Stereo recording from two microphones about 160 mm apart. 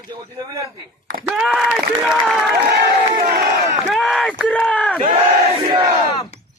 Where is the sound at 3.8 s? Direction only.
Centre (ahead or behind).